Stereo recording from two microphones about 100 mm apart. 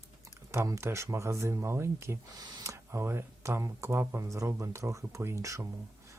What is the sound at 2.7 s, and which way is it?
Speech, 25° right (ahead or behind).